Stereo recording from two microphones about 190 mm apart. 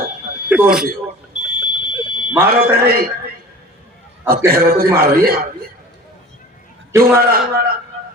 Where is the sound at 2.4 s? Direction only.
55° right (ahead or behind).